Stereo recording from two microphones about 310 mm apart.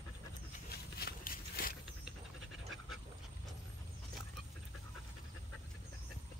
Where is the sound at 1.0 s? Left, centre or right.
Left.